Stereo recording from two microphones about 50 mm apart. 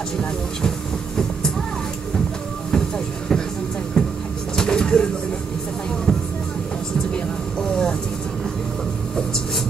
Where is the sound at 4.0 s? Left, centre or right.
Centre.